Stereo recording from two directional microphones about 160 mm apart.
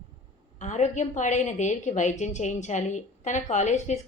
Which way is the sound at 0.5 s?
50° left (ahead or behind).